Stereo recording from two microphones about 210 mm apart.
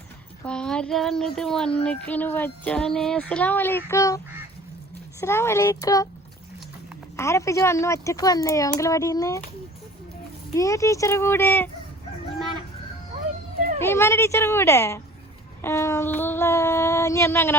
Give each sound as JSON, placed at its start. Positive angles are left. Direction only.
{"t": 0.4, "sound": "a sound", "side_deg": 5}
{"t": 5.2, "sound": "speech", "side_deg": 10}
{"t": 7.2, "sound": "speech", "side_deg": 15}
{"t": 10.5, "sound": "speech", "side_deg": 15}
{"t": 13.8, "sound": "speech", "side_deg": 10}